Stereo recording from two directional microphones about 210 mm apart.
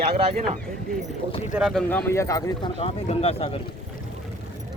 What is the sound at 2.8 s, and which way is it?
Speech, 30° left (ahead or behind).